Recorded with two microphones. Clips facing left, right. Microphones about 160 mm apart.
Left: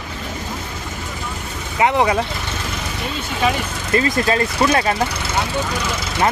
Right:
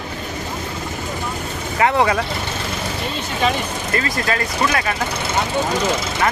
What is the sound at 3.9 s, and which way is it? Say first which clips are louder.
Speech: left 5 dB; 25° left (ahead or behind).